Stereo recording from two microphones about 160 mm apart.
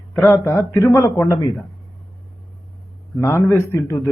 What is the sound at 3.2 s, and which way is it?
Speech, 15° left (ahead or behind).